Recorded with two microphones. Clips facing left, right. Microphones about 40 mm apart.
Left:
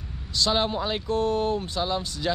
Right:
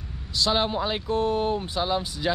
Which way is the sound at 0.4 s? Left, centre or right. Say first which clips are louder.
Even; centre.